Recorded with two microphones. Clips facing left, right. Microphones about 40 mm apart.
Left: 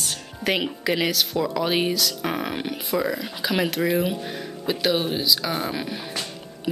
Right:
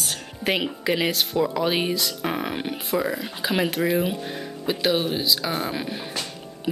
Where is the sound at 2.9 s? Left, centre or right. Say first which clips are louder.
Even; centre.